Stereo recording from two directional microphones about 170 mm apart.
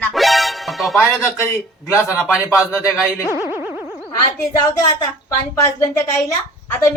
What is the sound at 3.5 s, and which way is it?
Boing, 15° right (ahead or behind).